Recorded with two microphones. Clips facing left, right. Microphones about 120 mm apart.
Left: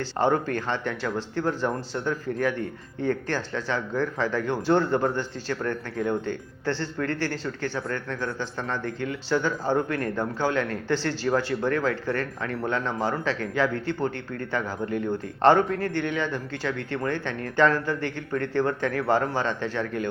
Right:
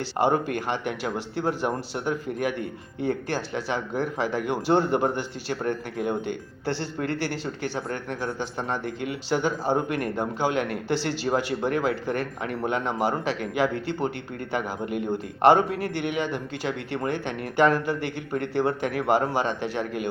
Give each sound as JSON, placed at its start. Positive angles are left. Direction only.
{"t": 0.0, "sound": "speech", "side_deg": -15}